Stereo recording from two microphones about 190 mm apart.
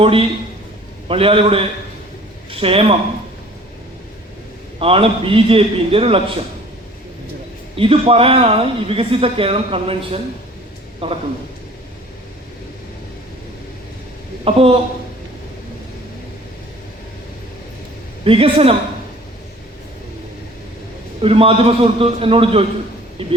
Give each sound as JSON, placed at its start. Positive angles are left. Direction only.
{"t": 0.0, "sound": "speech", "side_deg": -30}
{"t": 4.8, "sound": "speech", "side_deg": -30}
{"t": 7.8, "sound": "speech", "side_deg": -30}
{"t": 14.4, "sound": "speech", "side_deg": -30}
{"t": 18.3, "sound": "speech", "side_deg": -30}
{"t": 21.2, "sound": "speech", "side_deg": -30}